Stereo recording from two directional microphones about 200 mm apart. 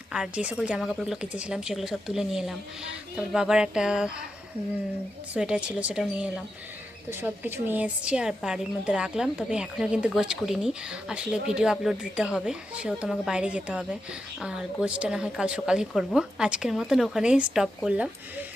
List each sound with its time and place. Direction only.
0.1 s a woman's voice: 5° right (ahead or behind)
5.3 s a woman's voice: 5° right (ahead or behind)